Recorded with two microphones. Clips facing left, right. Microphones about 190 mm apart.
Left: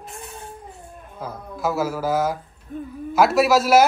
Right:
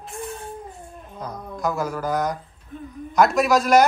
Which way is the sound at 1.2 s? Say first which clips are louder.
Left 1 dB; 5° left (ahead or behind).